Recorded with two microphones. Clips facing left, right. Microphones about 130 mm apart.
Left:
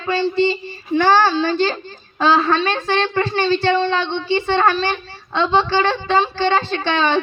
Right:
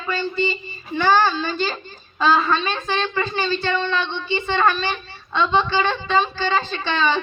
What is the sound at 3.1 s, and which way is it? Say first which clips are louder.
Speech: left 5 dB; 65° left (ahead or behind).